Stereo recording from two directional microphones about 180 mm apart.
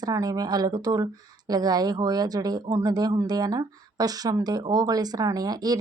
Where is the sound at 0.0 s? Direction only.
20° right (ahead or behind).